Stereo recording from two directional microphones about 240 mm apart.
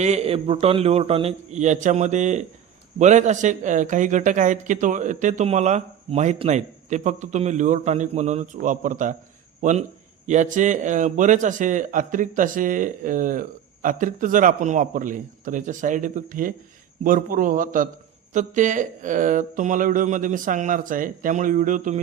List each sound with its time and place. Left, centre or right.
0.0 s a man's voice: right